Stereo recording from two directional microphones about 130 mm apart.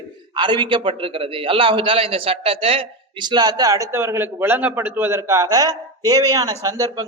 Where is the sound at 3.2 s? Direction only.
35° right (ahead or behind).